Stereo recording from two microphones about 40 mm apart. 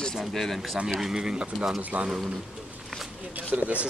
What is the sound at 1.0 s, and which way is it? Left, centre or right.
Speech, centre.